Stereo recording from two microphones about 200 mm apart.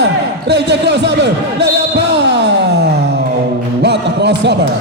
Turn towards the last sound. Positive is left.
turn(degrees=-55)  # may be behind; listen again after turning